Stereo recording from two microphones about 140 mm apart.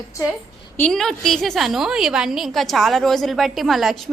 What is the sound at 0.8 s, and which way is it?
A woman's voice, 5° left (ahead or behind).